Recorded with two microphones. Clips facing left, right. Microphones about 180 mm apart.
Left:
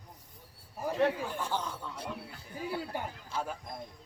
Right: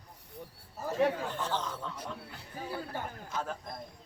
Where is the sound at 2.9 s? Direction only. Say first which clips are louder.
Left 1 dB; 15° left (ahead or behind).